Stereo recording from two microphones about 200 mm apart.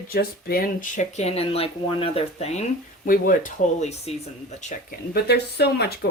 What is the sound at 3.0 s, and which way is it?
Speech, 40° left (ahead or behind).